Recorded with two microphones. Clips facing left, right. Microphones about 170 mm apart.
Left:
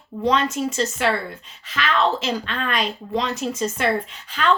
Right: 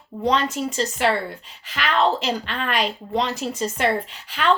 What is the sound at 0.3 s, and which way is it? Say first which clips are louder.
Speech: left 1 dB; 35° right (ahead or behind).